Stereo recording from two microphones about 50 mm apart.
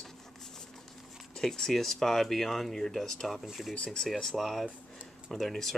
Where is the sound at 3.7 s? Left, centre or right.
Centre.